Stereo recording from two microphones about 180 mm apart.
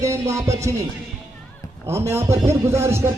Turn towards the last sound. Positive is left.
turn(degrees=-15)  # may be behind; listen again after turning